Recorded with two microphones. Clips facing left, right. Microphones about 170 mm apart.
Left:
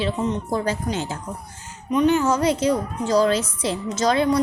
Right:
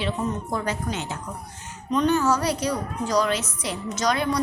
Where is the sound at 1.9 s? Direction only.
15° left (ahead or behind).